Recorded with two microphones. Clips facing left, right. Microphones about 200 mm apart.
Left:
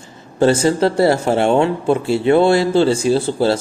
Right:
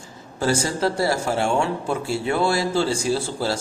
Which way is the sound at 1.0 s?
25° left (ahead or behind).